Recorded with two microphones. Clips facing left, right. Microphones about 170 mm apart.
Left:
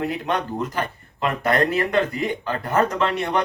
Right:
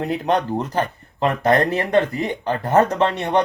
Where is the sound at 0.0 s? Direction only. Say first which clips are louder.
Right 4 dB; 35° right (ahead or behind).